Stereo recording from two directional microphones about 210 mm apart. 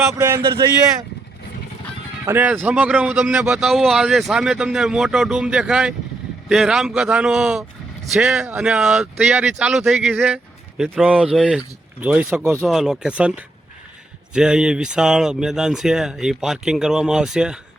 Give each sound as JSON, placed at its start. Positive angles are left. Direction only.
{"t": 0.1, "sound": "speech", "side_deg": -10}
{"t": 2.2, "sound": "a man's voice", "side_deg": -10}